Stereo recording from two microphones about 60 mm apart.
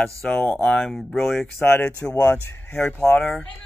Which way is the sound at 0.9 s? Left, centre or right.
Centre.